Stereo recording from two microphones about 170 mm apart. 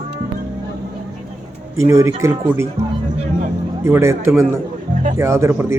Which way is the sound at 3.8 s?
15° right (ahead or behind).